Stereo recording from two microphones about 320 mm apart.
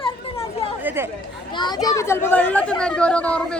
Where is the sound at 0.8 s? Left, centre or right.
Centre.